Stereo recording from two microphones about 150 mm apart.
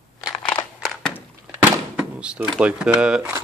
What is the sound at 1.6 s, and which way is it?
Thunk, 10° right (ahead or behind).